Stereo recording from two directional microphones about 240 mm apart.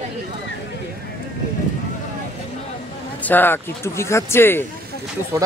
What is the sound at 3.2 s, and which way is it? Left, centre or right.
Speech, centre.